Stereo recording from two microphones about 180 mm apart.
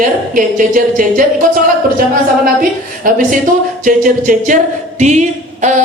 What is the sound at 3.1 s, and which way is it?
A woman's voice, 50° right (ahead or behind).